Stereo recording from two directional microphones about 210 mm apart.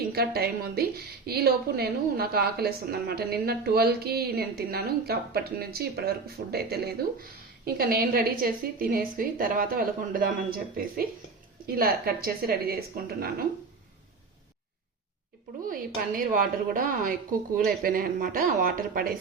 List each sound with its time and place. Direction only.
0.1 s a woman's voice: 50° right (ahead or behind)
16.0 s a woman's voice: 40° right (ahead or behind)